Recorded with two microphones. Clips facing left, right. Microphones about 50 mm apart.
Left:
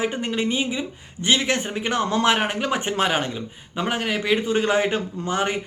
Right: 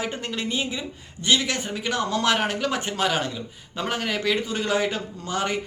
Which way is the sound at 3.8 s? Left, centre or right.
Centre.